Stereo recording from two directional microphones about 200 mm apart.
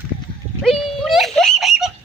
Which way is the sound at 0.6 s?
Centre (ahead or behind).